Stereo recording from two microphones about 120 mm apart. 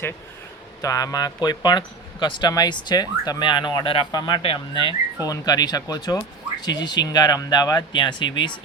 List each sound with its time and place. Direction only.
0.8 s speech: 30° left (ahead or behind)